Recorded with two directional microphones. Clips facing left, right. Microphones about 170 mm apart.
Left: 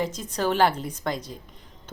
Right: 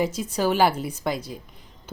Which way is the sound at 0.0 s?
10° right (ahead or behind).